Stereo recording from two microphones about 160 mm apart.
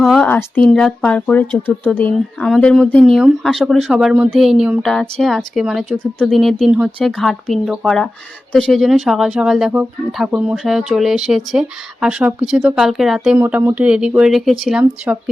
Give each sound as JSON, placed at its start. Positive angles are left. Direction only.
{"t": 0.0, "sound": "speech", "side_deg": 0}
{"t": 0.3, "sound": "speech", "side_deg": 15}
{"t": 0.6, "sound": "speech", "side_deg": 0}
{"t": 13.4, "sound": "speech", "side_deg": -15}